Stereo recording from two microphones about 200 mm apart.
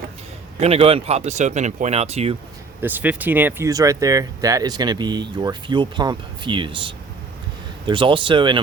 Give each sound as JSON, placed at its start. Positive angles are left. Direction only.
{"t": 0.6, "sound": "speech", "side_deg": -30}
{"t": 2.8, "sound": "speech", "side_deg": -10}